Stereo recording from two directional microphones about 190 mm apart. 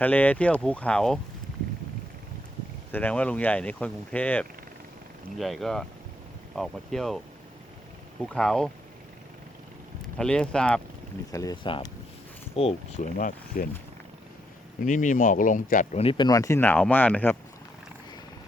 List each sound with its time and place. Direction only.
0.0 s speech: 10° left (ahead or behind)
2.9 s speech: 10° left (ahead or behind)
8.2 s speech: 5° left (ahead or behind)
10.2 s speech: 5° left (ahead or behind)
11.3 s speech: 20° left (ahead or behind); by 13.7 s 45° left (ahead or behind)
14.8 s speech: 45° left (ahead or behind); by 17.3 s 10° left (ahead or behind)